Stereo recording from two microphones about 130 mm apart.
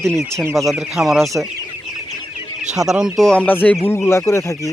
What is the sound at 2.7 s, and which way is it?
Speech, 5° right (ahead or behind).